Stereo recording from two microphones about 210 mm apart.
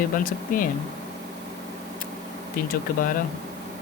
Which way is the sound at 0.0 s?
40° left (ahead or behind).